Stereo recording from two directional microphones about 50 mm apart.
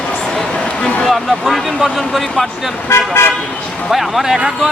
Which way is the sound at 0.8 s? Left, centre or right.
Left.